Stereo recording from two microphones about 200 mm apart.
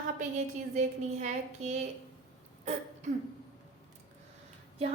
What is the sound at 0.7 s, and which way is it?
A woman's voice, 35° right (ahead or behind).